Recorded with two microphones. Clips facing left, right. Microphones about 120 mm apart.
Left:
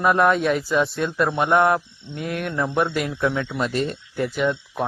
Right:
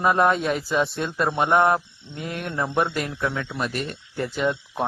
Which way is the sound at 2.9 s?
15° left (ahead or behind).